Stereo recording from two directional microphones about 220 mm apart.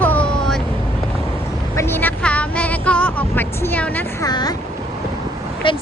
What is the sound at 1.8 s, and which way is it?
Vehicle, 10° left (ahead or behind).